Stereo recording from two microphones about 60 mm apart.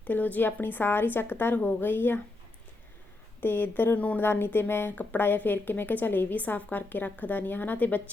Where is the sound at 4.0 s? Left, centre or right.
Left.